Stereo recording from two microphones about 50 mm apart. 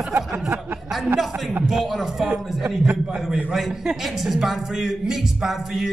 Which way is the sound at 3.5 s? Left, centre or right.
Centre.